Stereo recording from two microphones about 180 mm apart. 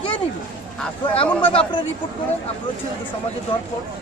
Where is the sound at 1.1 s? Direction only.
30° left (ahead or behind).